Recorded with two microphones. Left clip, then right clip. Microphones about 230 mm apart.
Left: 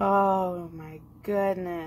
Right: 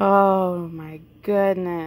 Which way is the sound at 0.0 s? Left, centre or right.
Right.